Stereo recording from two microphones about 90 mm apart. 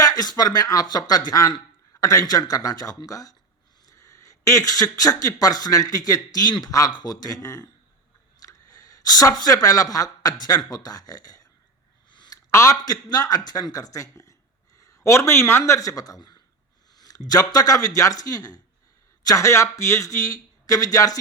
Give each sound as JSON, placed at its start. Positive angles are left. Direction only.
{"t": 0.0, "sound": "a man's voice", "side_deg": 45}
{"t": 12.1, "sound": "a sound", "side_deg": 55}
{"t": 12.5, "sound": "speech", "side_deg": 30}
{"t": 12.8, "sound": "a man's voice", "side_deg": 45}